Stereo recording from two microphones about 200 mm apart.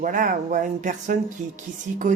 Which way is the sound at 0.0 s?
40° right (ahead or behind).